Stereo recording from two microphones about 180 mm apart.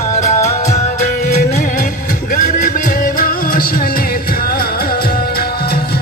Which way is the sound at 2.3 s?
50° left (ahead or behind).